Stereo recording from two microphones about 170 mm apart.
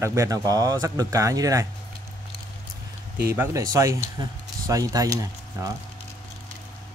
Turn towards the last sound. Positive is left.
turn(degrees=-20)  # may be behind; listen again after turning